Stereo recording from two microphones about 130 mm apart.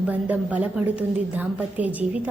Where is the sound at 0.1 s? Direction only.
10° right (ahead or behind).